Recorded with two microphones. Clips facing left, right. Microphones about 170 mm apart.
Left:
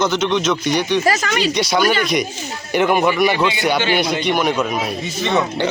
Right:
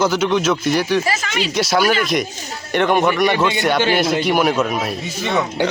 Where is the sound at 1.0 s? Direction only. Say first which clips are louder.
Left 4 dB; 45° left (ahead or behind).